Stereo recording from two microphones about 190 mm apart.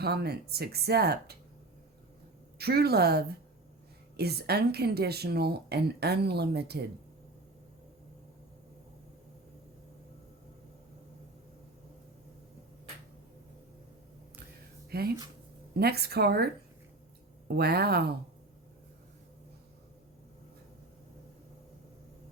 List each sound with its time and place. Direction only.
0.0 s speech: 55° right (ahead or behind)
2.6 s speech: 55° right (ahead or behind)
14.8 s a sound: 55° right (ahead or behind)
15.8 s speech: 55° right (ahead or behind)
17.6 s speech: 55° right (ahead or behind)